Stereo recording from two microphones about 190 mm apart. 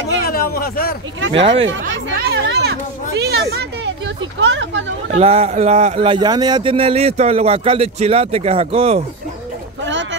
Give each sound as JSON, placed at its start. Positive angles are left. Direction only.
{"t": 0.3, "sound": "a sound", "side_deg": 50}
{"t": 1.4, "sound": "speech", "side_deg": -30}
{"t": 2.1, "sound": "speech", "side_deg": -60}
{"t": 5.1, "sound": "speech", "side_deg": -35}